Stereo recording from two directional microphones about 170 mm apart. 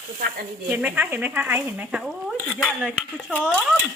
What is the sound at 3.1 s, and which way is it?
Speech, 5° left (ahead or behind).